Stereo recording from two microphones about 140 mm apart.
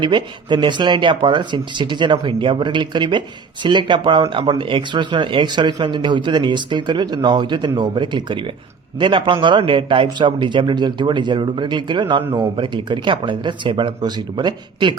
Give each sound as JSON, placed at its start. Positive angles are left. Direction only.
{"t": 0.0, "sound": "speech", "side_deg": -35}